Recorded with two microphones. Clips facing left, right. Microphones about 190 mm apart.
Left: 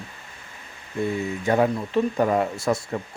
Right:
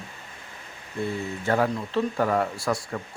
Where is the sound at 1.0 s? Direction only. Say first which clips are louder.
Left 4 dB; 15° left (ahead or behind).